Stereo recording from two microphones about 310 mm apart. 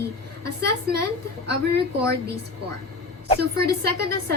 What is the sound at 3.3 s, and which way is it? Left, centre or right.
Speech, right.